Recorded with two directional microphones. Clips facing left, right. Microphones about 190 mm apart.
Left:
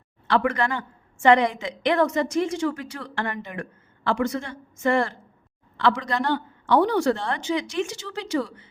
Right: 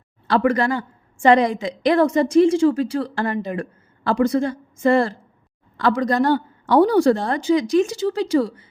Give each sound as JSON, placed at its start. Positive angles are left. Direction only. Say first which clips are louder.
{"t": 0.3, "sound": "a woman's voice", "louder": "right 5 dB", "side_deg": -35}